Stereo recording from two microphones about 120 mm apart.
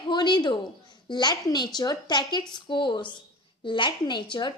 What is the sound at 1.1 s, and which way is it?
A woman's voice, 35° left (ahead or behind).